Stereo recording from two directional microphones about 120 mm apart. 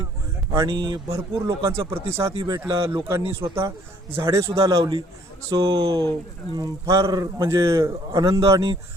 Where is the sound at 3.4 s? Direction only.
25° right (ahead or behind).